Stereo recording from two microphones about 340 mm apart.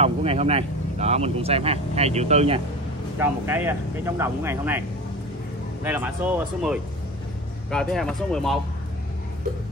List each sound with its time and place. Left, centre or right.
0.0 s speech: centre
3.2 s speech: centre
5.9 s speech: centre